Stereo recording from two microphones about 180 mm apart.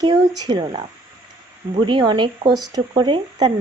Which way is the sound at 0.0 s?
20° right (ahead or behind).